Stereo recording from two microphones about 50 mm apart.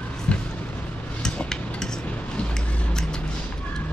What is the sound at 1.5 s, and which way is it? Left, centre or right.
Cutlery, centre.